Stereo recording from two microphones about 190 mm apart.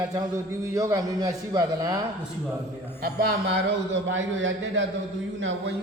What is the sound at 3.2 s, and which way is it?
Speech, 70° right (ahead or behind).